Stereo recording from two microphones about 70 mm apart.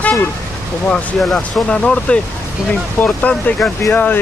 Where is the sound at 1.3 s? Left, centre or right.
Centre.